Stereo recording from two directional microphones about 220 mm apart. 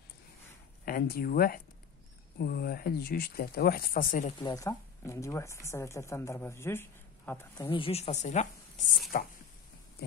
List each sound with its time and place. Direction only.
0.8 s speech: 40° left (ahead or behind)
4.4 s speech: 20° left (ahead or behind)
7.7 s a woman's voice: 25° left (ahead or behind)